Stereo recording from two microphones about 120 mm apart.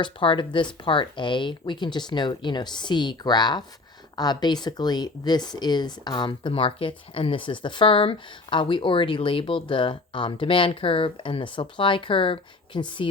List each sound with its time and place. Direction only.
0.0 s speech: 40° left (ahead or behind)